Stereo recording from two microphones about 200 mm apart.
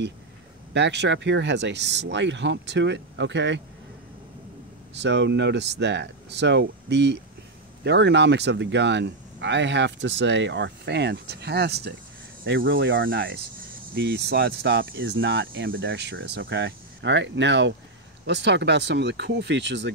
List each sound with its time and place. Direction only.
0.7 s speech: 60° right (ahead or behind)
4.9 s speech: 60° right (ahead or behind)
12.4 s speech: 65° right (ahead or behind)